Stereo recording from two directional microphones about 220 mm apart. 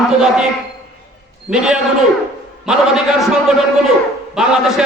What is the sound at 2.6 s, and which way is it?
A man's voice, centre (ahead or behind).